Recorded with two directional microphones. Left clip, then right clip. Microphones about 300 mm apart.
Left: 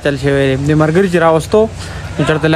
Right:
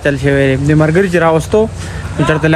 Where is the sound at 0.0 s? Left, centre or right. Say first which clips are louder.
Right 1 dB; centre.